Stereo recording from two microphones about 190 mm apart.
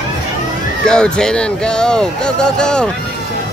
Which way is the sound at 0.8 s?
5° left (ahead or behind).